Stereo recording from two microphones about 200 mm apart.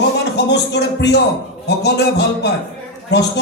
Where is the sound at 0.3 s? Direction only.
60° left (ahead or behind).